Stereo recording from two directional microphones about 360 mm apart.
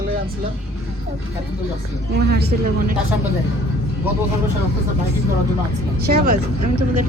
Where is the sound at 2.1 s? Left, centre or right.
Right.